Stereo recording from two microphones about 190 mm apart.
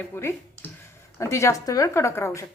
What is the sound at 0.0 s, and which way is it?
A woman's voice, 10° left (ahead or behind).